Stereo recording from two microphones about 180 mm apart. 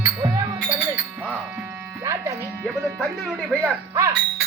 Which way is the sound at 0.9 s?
5° right (ahead or behind).